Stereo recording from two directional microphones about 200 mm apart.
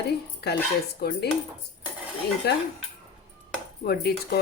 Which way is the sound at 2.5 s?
55° left (ahead or behind).